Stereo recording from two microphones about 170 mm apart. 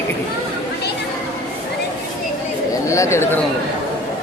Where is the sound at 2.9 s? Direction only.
15° left (ahead or behind).